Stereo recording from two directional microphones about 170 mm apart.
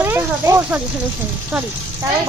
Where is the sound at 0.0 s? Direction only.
15° right (ahead or behind).